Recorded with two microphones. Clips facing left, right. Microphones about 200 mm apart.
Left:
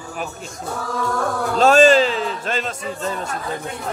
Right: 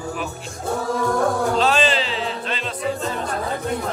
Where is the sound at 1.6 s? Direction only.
45° left (ahead or behind).